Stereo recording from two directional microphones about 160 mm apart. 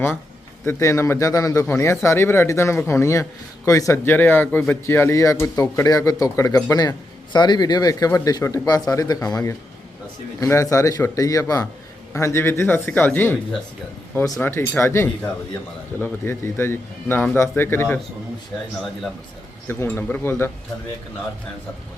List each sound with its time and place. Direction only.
0.6 s a man's voice: 15° left (ahead or behind)
14.4 s a man's voice: 15° left (ahead or behind)
19.6 s a man's voice: 15° left (ahead or behind)